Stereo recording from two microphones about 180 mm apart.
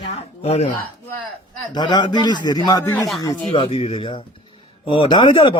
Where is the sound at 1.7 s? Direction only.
25° left (ahead or behind).